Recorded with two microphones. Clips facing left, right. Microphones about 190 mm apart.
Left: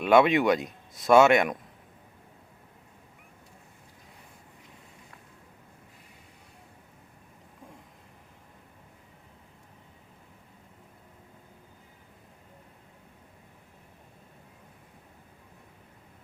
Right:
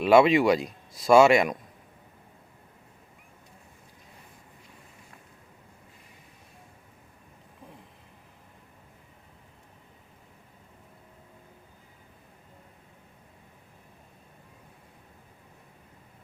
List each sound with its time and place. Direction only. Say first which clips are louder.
0.0 s speech: right 2 dB; centre (ahead or behind)